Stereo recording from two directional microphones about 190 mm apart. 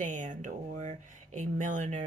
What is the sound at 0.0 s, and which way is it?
Speech, 40° right (ahead or behind).